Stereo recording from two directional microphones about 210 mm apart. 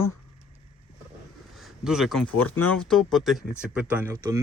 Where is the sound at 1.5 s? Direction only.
Centre (ahead or behind).